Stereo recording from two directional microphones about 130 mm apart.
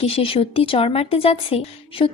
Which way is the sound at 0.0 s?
50° left (ahead or behind).